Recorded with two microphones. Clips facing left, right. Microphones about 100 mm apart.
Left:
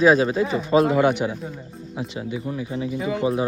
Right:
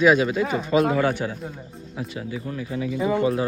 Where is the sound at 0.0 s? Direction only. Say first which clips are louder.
Left 1 dB; 35° left (ahead or behind).